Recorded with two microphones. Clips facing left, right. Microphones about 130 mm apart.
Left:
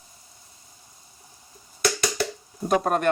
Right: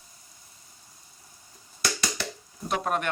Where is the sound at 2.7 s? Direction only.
40° left (ahead or behind).